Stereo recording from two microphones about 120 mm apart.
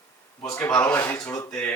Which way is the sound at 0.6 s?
20° left (ahead or behind).